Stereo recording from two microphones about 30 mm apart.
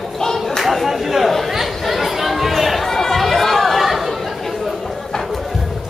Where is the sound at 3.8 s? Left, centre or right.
Centre.